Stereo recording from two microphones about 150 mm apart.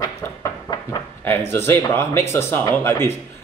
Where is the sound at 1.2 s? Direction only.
15° left (ahead or behind).